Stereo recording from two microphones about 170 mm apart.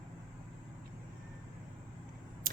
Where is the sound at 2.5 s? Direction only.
55° right (ahead or behind).